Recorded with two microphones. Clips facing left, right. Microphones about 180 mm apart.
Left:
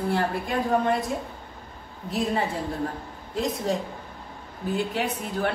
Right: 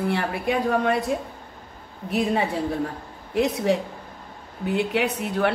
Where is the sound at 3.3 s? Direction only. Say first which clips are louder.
Right 5 dB; 70° right (ahead or behind).